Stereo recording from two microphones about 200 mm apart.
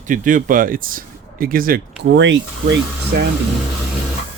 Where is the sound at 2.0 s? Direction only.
65° right (ahead or behind).